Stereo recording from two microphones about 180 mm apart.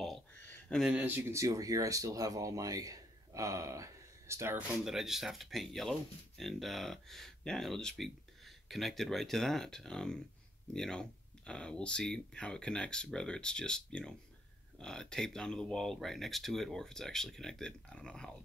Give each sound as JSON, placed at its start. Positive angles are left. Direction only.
{"t": 0.0, "sound": "speech", "side_deg": 5}
{"t": 4.8, "sound": "speech", "side_deg": 0}